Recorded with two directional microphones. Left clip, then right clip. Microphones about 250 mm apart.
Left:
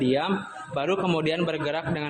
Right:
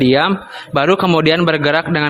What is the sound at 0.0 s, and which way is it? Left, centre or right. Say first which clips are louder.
A man's voice: right 11 dB; right.